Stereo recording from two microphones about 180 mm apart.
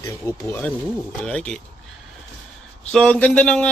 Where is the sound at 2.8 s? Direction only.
5° left (ahead or behind).